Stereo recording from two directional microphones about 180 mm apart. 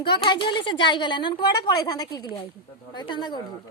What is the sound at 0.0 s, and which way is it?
Speech, 25° left (ahead or behind).